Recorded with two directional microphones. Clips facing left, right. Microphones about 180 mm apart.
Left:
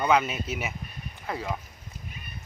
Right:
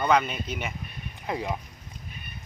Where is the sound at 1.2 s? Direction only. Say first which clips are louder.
Right 2 dB; 15° right (ahead or behind).